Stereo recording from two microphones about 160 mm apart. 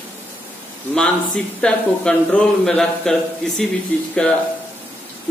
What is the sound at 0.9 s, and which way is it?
A man's voice, 5° left (ahead or behind).